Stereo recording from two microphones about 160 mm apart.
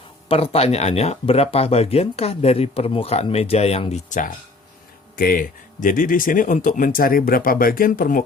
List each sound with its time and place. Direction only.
0.3 s speech: 35° left (ahead or behind)
5.1 s speech: 65° left (ahead or behind)